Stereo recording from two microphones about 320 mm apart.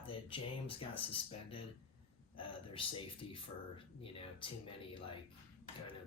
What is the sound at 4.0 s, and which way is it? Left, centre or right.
Speech, centre.